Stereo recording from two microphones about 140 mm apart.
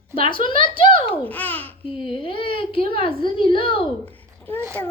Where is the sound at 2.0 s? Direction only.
40° left (ahead or behind).